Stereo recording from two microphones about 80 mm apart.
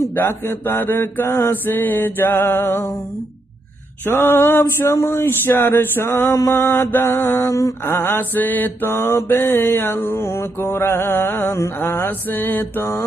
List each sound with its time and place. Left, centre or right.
0.2 s male singing: left
4.0 s mantra: left
4.8 s male singing: left